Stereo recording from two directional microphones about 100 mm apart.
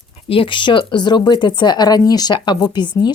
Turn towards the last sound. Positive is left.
turn(degrees=50)  # may be behind; listen again after turning